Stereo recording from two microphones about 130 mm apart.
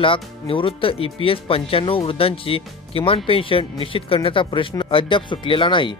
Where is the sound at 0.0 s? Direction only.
40° left (ahead or behind).